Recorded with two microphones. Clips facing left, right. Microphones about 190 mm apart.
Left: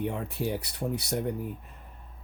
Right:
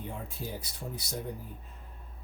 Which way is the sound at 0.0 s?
70° left (ahead or behind).